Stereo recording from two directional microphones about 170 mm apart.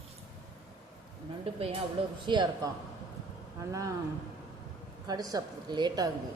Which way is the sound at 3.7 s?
20° right (ahead or behind).